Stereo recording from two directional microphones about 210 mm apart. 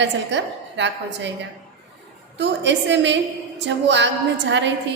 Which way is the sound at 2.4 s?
55° right (ahead or behind).